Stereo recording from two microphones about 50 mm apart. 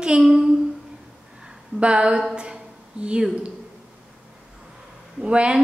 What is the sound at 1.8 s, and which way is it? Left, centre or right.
Child singing, right.